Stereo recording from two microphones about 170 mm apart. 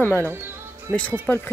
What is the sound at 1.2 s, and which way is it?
Speech, 15° left (ahead or behind).